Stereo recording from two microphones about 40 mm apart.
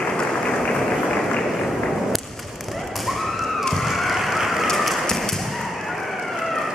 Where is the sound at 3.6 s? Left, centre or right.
Centre.